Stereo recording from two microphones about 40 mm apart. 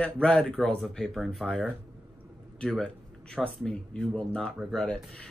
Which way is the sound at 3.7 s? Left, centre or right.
Left.